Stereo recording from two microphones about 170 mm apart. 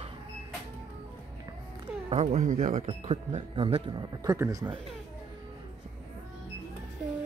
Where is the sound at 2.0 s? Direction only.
40° right (ahead or behind); by 4.7 s 20° right (ahead or behind).